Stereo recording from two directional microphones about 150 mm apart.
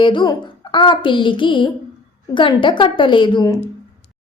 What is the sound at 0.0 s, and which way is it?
A woman's voice, 35° left (ahead or behind).